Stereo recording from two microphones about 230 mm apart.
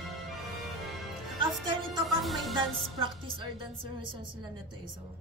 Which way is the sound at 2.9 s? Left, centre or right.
Right.